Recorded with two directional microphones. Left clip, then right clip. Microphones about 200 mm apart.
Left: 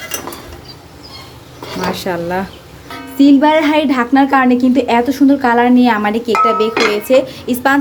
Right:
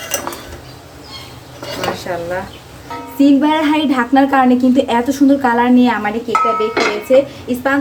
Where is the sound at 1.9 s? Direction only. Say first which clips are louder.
Left 2 dB; 50° left (ahead or behind).